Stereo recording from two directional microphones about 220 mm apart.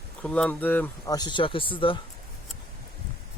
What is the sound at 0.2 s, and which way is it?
Speech, 5° left (ahead or behind).